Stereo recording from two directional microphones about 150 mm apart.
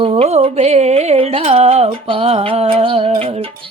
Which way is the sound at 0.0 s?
40° right (ahead or behind).